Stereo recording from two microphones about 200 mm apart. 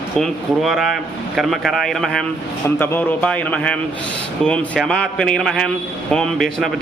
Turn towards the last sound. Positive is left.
turn(degrees=0)  # may be behind; listen again after turning